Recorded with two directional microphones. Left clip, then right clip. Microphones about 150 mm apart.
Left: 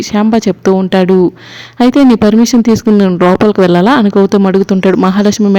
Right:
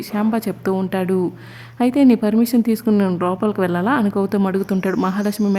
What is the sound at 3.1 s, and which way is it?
Speech, 40° left (ahead or behind).